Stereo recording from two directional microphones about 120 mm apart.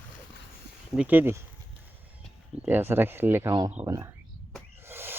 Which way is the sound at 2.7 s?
15° right (ahead or behind).